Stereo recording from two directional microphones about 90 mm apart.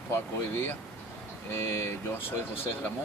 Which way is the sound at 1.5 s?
30° left (ahead or behind).